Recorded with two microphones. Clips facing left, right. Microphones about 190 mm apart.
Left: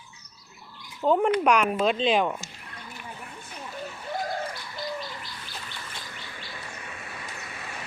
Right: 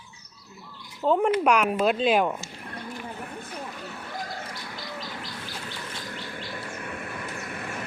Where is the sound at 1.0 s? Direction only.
Centre (ahead or behind).